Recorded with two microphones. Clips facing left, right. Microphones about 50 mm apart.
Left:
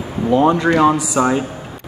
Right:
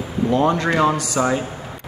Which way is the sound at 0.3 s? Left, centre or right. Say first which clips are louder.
Left 5 dB; centre.